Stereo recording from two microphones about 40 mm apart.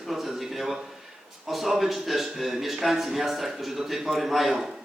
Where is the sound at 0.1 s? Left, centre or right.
Centre.